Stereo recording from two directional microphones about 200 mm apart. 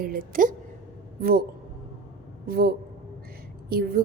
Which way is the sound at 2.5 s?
50° right (ahead or behind).